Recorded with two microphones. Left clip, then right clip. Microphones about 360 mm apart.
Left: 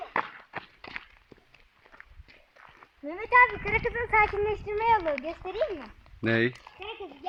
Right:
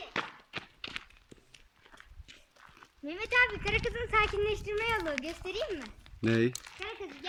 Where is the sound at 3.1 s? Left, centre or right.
Centre.